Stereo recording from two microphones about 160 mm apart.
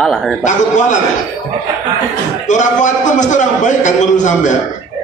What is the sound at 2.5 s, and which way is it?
A man's voice, 50° left (ahead or behind).